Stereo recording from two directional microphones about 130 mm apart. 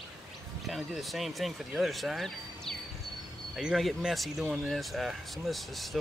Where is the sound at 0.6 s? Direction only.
Centre (ahead or behind).